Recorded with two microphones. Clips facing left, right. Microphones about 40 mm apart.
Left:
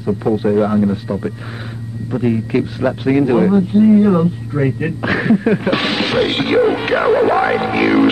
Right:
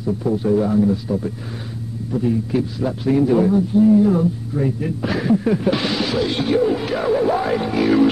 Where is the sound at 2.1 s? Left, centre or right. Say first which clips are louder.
Left 3 dB; left.